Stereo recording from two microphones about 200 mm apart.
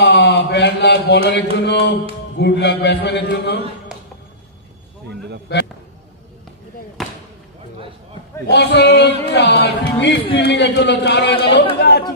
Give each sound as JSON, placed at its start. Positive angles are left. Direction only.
{"t": 0.0, "sound": "a sound", "side_deg": 60}
{"t": 2.3, "sound": "speech", "side_deg": 60}
{"t": 3.9, "sound": "music", "side_deg": -5}
{"t": 5.5, "sound": "a man's voice", "side_deg": 55}
{"t": 7.0, "sound": "basketball bounce", "side_deg": 0}
{"t": 8.5, "sound": "speech", "side_deg": 55}